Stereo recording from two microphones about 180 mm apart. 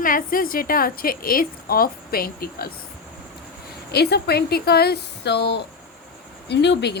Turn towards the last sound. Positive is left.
turn(degrees=70)  # may be behind; listen again after turning